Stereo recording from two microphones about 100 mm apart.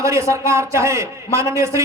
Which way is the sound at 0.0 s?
30° right (ahead or behind).